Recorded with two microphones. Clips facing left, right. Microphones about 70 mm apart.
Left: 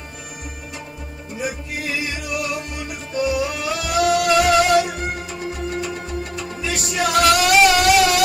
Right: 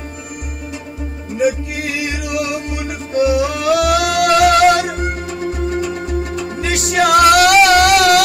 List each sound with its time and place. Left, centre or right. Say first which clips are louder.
1.4 s music: right 10 dB; right
6.6 s music: right 7 dB; right